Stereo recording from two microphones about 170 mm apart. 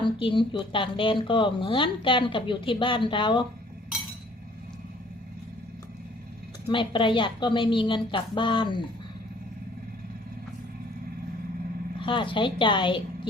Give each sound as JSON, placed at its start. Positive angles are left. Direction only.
{"t": 0.0, "sound": "a woman's voice", "side_deg": 30}
{"t": 6.7, "sound": "a woman's voice", "side_deg": 30}
{"t": 11.9, "sound": "a woman's voice", "side_deg": 30}